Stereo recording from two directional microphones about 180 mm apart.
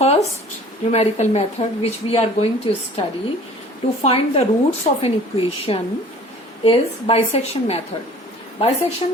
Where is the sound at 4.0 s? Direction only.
35° left (ahead or behind).